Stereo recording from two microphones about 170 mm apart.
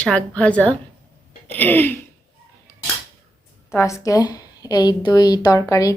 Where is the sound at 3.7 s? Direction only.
15° left (ahead or behind).